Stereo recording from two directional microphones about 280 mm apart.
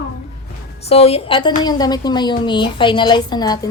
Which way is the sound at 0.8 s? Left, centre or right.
Left.